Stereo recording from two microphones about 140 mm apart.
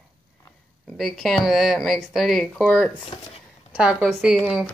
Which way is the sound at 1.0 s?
Centre (ahead or behind).